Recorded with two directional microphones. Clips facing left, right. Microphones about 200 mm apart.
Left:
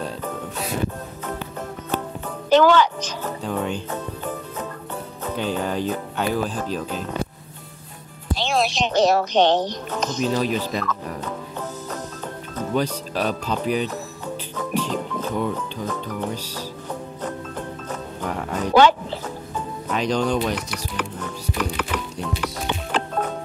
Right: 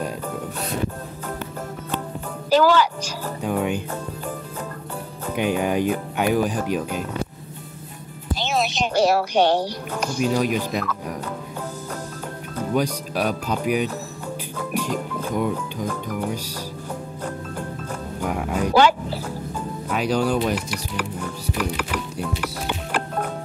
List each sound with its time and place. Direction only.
2.5 s a woman's voice: 5° right (ahead or behind)
5.3 s speech: 15° right (ahead or behind)
8.4 s speech: centre (ahead or behind)
12.7 s speech: 10° right (ahead or behind)
18.2 s speech: 10° right (ahead or behind)